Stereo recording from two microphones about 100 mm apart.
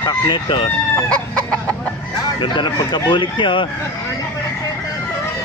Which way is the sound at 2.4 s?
50° left (ahead or behind).